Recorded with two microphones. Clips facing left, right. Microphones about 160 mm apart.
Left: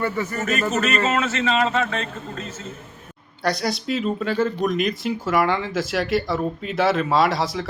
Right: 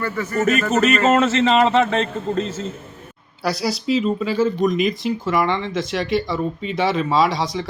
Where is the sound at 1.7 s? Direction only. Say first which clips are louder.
Right 6 dB; 30° right (ahead or behind).